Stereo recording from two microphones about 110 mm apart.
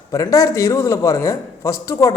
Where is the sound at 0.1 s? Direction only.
30° left (ahead or behind).